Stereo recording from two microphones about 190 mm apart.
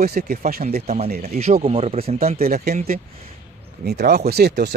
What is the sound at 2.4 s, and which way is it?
Speech, 50° right (ahead or behind).